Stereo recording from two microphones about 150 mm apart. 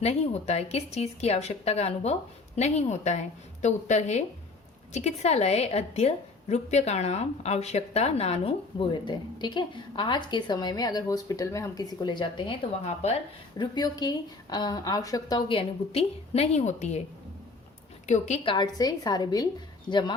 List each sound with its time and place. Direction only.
0.0 s a woman's voice: 45° left (ahead or behind)
13.6 s a woman's voice: 25° left (ahead or behind); by 17.0 s 50° left (ahead or behind)
18.0 s a woman's voice: 50° left (ahead or behind)
18.4 s a woman's voice: 30° left (ahead or behind)